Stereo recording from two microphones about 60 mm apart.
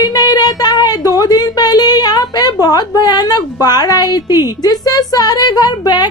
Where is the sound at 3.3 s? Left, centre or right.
Left.